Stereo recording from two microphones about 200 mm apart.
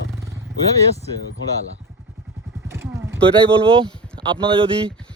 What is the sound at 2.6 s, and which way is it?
Vehicle, 15° right (ahead or behind).